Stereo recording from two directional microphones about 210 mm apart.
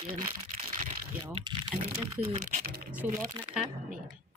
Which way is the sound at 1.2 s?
20° right (ahead or behind).